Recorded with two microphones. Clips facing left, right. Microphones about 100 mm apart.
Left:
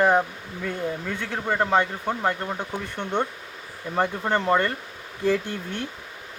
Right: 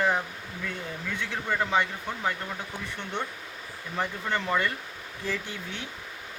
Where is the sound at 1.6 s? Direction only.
45° left (ahead or behind).